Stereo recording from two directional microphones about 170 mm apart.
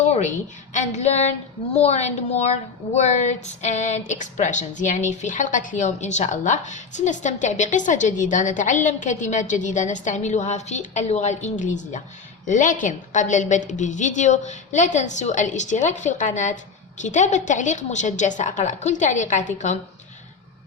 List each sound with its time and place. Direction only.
0.1 s a woman's voice: 45° left (ahead or behind)